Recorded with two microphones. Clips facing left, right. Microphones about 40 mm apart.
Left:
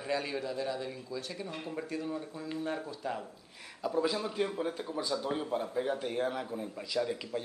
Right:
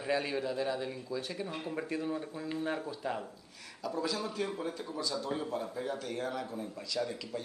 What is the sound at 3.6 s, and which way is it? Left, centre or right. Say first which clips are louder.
A man's voice: left 4 dB; left.